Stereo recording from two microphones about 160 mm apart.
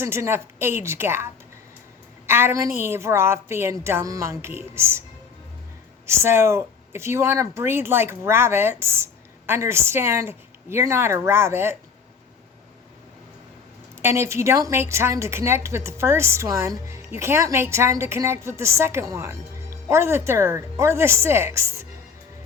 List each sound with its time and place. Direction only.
0.0 s a woman's voice: 15° right (ahead or behind)
6.1 s a woman's voice: 15° right (ahead or behind)
14.0 s a woman's voice: 15° right (ahead or behind)